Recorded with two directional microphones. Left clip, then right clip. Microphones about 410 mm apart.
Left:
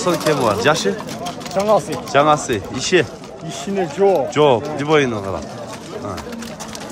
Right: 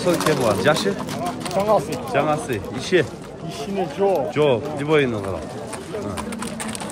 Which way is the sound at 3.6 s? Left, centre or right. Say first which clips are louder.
Left 5 dB; left.